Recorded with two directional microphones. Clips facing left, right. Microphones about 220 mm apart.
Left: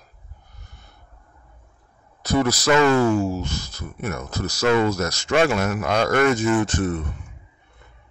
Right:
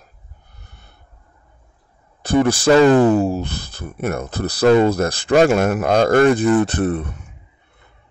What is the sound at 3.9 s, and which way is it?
Speech, 55° right (ahead or behind).